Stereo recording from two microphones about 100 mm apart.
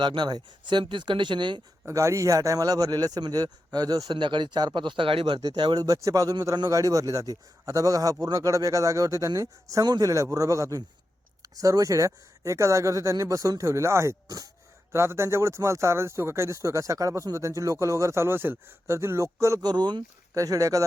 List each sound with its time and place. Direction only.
0.0 s speech: 50° right (ahead or behind)
1.9 s speech: 30° right (ahead or behind)
4.2 s speech: 55° right (ahead or behind)
5.4 s speech: 45° right (ahead or behind)
5.8 s speech: 35° right (ahead or behind)
19.6 s speech: 45° right (ahead or behind)
20.3 s speech: 35° right (ahead or behind)